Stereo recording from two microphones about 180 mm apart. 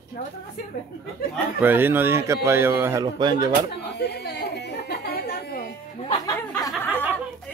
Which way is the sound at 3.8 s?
70° left (ahead or behind).